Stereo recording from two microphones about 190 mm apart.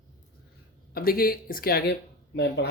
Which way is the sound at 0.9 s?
50° left (ahead or behind).